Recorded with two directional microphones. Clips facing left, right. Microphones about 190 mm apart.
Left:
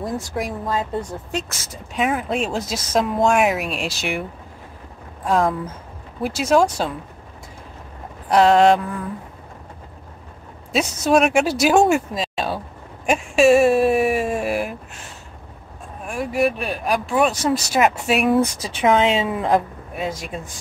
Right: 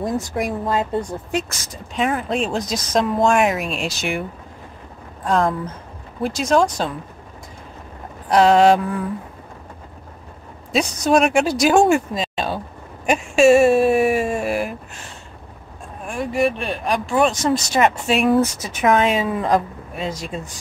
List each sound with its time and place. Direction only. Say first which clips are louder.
0.0 s speech: right 3 dB; 25° right (ahead or behind)
2.0 s speech: right 1 dB; 5° left (ahead or behind)
5.2 s speech: even; 5° left (ahead or behind)
8.3 s speech: right 1 dB; centre (ahead or behind)
10.7 s speech: even; centre (ahead or behind)
13.0 s a sound: right 1 dB; centre (ahead or behind)
16.1 s speech: even; 5° left (ahead or behind)
18.6 s a woman's voice: even; 25° left (ahead or behind)